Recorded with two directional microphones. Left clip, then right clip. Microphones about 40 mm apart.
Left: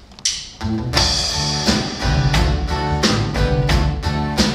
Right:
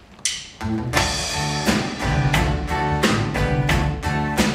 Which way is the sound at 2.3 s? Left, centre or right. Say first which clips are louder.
Even; centre.